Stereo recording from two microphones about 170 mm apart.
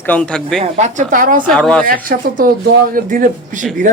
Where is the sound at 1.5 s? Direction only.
5° left (ahead or behind).